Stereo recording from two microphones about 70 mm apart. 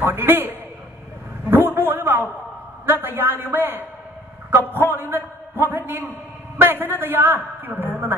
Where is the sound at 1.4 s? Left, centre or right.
Right.